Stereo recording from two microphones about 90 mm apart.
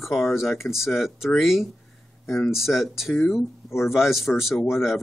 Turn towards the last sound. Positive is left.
turn(degrees=0)  # may be behind; listen again after turning